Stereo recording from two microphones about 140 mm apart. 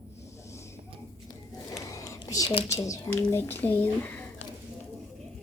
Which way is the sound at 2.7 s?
20° left (ahead or behind).